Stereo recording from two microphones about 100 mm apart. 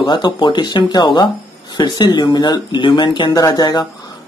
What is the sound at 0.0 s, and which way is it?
Speech, 45° left (ahead or behind).